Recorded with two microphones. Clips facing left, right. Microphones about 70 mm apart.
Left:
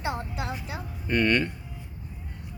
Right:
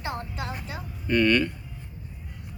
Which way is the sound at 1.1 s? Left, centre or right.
Left.